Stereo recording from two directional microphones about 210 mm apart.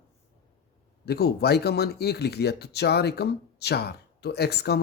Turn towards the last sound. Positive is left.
turn(degrees=50)  # may be behind; listen again after turning